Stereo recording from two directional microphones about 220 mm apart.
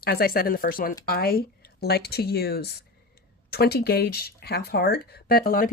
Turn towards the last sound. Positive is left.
turn(degrees=40)  # may be behind; listen again after turning